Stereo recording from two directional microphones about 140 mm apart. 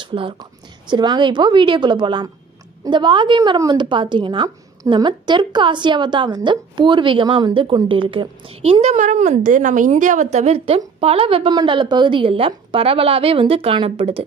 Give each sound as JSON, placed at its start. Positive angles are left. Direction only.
{"t": 0.0, "sound": "a woman's voice", "side_deg": -35}
{"t": 8.8, "sound": "a woman's voice", "side_deg": -60}